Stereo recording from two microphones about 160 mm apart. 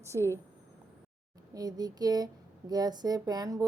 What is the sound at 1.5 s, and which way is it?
Speech, 25° right (ahead or behind).